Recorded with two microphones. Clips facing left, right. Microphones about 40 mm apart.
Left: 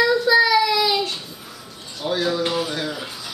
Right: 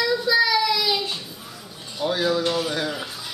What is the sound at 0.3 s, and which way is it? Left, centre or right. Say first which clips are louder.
Child singing: left 2 dB; centre.